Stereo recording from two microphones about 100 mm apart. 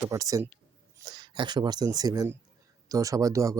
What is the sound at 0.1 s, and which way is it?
Speech, 35° right (ahead or behind).